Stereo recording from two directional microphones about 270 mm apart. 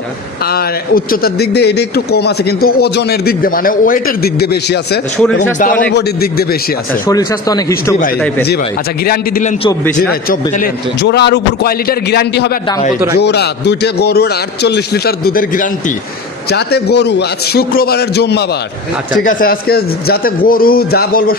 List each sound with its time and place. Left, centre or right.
0.9 s a man's voice: left
5.6 s a man's voice: left
7.1 s speech: centre
9.0 s a man's voice: left
10.6 s a man's voice: left